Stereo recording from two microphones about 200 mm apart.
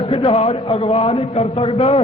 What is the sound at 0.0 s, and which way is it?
A man's voice, 25° left (ahead or behind).